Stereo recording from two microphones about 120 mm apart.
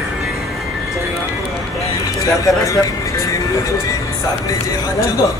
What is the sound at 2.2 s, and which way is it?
Speech, 30° left (ahead or behind).